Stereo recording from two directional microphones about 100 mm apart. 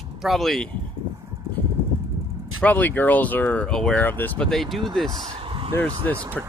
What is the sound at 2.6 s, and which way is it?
Speech, 15° left (ahead or behind).